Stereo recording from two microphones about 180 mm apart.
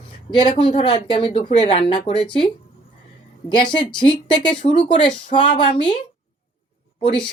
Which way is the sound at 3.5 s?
25° left (ahead or behind).